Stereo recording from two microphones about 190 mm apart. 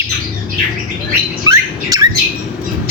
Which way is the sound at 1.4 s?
20° right (ahead or behind).